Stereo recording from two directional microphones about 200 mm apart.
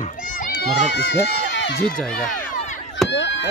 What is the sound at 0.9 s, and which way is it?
Speech, 55° left (ahead or behind).